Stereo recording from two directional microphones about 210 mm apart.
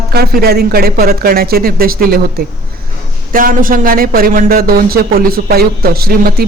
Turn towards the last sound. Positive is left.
turn(degrees=-45)  # may be behind; listen again after turning